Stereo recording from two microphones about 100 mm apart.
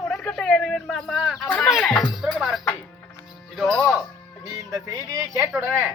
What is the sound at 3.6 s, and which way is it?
Speech, 10° left (ahead or behind).